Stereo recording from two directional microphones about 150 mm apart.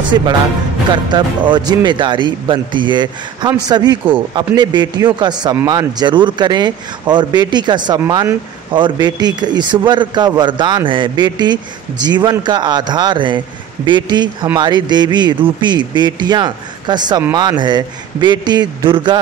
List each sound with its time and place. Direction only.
0.1 s speech: 25° right (ahead or behind)